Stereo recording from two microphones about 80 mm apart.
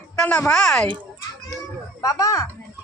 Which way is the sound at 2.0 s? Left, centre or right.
Left.